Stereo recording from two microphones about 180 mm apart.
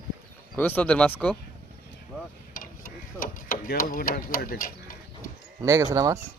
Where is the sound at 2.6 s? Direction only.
50° left (ahead or behind).